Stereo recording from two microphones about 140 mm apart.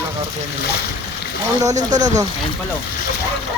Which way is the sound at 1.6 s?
60° right (ahead or behind).